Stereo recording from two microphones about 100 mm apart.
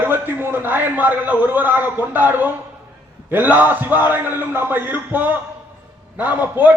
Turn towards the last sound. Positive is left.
turn(degrees=-20)  # may be behind; listen again after turning